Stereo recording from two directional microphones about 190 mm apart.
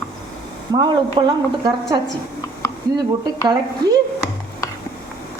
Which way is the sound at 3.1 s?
20° right (ahead or behind).